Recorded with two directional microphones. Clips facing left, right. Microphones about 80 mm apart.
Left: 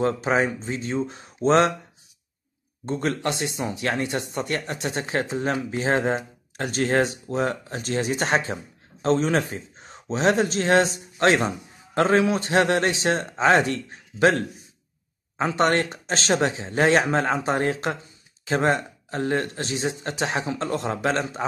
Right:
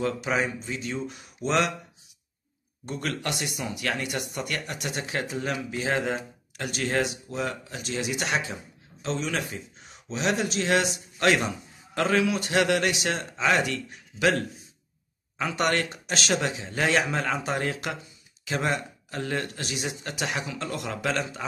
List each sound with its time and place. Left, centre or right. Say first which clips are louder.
0.0 s speech: left 5 dB; left
2.8 s speech: left 6 dB; left